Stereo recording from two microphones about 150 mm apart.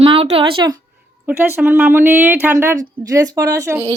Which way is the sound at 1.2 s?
10° right (ahead or behind).